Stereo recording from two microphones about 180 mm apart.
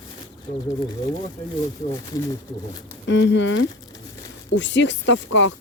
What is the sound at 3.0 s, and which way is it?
Speech, 90° left.